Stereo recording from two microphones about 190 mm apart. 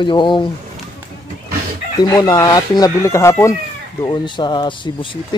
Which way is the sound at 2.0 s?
20° left (ahead or behind).